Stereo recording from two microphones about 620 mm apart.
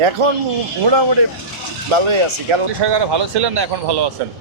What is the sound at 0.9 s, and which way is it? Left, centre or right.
Speech, right.